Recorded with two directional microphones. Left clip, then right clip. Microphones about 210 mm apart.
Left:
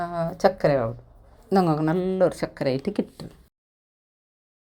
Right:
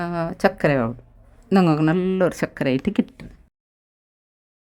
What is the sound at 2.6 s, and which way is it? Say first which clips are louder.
Speech: right 3 dB; 40° right (ahead or behind).